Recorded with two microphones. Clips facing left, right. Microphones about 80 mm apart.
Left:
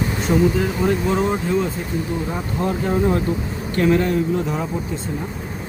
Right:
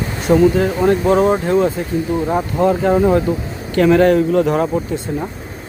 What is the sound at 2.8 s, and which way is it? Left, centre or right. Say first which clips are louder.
Speech: right 6 dB; right.